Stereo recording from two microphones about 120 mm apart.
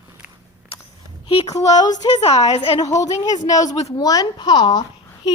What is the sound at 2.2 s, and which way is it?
Speech, 65° left (ahead or behind).